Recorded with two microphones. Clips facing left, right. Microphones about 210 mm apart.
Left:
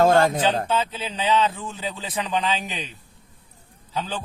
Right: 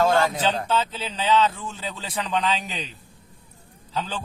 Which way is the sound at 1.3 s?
10° left (ahead or behind).